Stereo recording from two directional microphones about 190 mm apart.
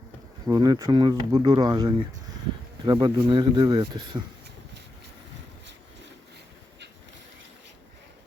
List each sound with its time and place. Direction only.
0.4 s speech: 20° right (ahead or behind)